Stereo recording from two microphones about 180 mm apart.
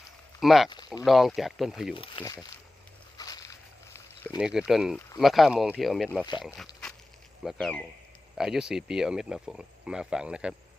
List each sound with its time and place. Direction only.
0.3 s speech: centre (ahead or behind)
2.0 s speech: 30° left (ahead or behind)
3.2 s walk: 20° left (ahead or behind)
4.4 s speech: 5° right (ahead or behind)
4.9 s speech: 15° left (ahead or behind)
5.2 s speech: centre (ahead or behind)
7.4 s speech: 5° left (ahead or behind)